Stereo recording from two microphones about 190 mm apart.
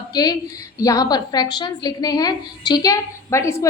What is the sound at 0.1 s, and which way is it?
A woman's voice, 20° left (ahead or behind).